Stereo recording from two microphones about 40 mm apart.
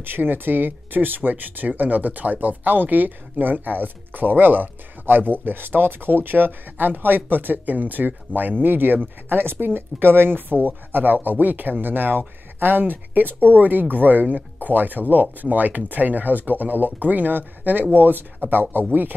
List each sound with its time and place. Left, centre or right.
0.0 s speech: right